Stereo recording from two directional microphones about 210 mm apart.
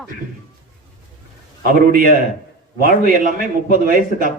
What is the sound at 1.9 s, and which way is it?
A man's voice, 40° right (ahead or behind).